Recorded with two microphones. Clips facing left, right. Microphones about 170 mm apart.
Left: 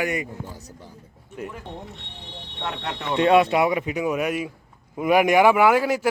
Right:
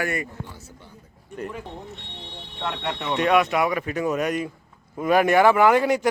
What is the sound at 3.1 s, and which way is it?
A man's voice, 25° left (ahead or behind).